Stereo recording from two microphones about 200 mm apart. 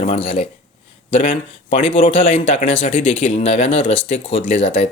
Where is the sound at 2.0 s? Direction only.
40° left (ahead or behind).